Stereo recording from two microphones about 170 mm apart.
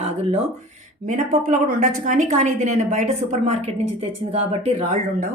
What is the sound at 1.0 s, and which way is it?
A woman's voice, 50° right (ahead or behind).